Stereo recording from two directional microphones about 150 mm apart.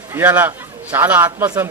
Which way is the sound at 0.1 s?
15° right (ahead or behind).